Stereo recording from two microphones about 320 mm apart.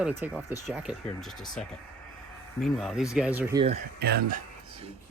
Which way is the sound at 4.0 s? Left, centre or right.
Right.